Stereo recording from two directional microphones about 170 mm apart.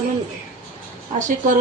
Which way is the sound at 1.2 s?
50° right (ahead or behind).